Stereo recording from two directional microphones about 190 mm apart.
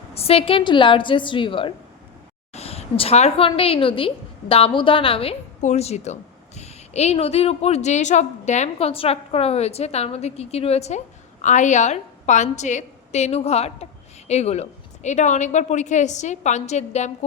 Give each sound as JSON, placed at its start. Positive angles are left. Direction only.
{"t": 0.1, "sound": "a woman's voice", "side_deg": 30}